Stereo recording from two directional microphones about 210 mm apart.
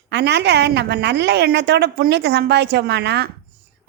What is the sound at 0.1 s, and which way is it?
A woman's voice, 55° right (ahead or behind).